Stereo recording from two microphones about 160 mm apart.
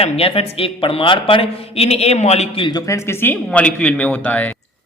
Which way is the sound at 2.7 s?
20° left (ahead or behind).